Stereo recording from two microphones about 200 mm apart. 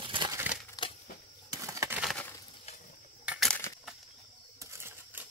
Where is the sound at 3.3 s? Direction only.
Centre (ahead or behind).